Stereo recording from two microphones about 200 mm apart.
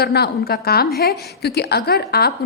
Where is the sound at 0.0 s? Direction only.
55° left (ahead or behind).